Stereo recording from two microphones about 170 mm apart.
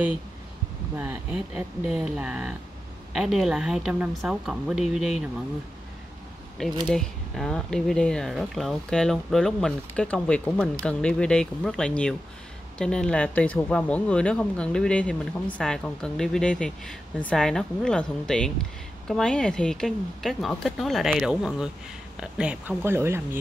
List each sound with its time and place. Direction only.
0.9 s speech: 5° right (ahead or behind)
6.9 s speech: 5° left (ahead or behind); by 23.4 s 15° right (ahead or behind)